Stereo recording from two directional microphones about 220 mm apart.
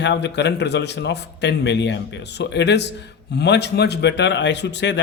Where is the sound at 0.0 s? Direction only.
50° left (ahead or behind).